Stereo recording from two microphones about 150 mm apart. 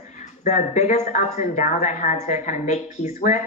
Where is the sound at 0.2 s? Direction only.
50° left (ahead or behind).